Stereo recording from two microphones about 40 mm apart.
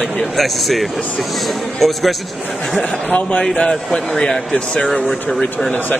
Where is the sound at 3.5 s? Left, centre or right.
Left.